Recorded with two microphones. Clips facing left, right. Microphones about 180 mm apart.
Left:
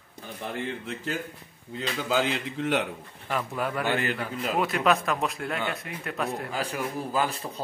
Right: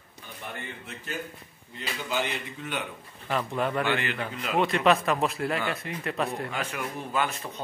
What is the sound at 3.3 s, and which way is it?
Speech, 5° left (ahead or behind).